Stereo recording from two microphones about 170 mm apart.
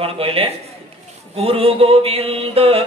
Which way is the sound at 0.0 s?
35° right (ahead or behind).